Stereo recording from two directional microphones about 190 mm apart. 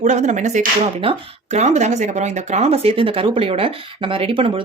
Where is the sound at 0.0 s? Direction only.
40° right (ahead or behind).